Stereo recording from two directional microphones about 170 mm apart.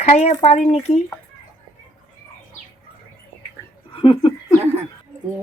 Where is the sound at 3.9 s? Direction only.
30° left (ahead or behind).